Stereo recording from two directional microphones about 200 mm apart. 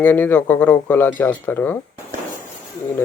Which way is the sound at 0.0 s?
10° left (ahead or behind).